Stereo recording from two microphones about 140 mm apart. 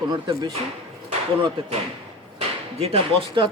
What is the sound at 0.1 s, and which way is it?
Speech, 30° right (ahead or behind).